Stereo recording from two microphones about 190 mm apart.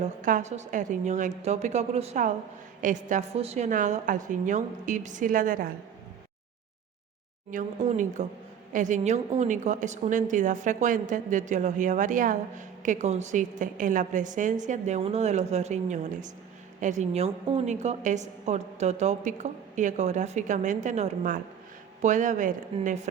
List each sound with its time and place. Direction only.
0.0 s a woman's voice: 45° right (ahead or behind)
7.5 s a woman's voice: 40° right (ahead or behind)